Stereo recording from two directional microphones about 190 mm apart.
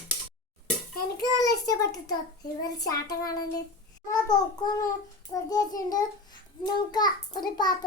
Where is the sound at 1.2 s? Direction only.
20° left (ahead or behind).